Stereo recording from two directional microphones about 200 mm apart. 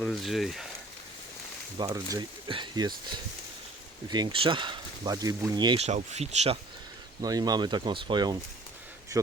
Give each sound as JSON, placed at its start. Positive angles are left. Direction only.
{"t": 0.0, "sound": "speech", "side_deg": 0}
{"t": 1.8, "sound": "speech", "side_deg": -20}
{"t": 5.8, "sound": "speech", "side_deg": -35}
{"t": 7.2, "sound": "speech", "side_deg": -20}